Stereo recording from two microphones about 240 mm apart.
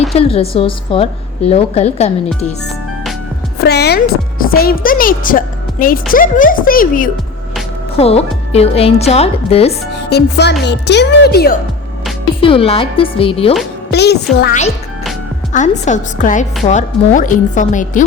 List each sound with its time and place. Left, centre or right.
0.0 s a woman's voice: left
3.6 s speech: left
7.9 s a woman's voice: left
9.9 s music: left
10.6 s speech: left
12.4 s a woman's voice: left
13.9 s speech: left
15.5 s speech: left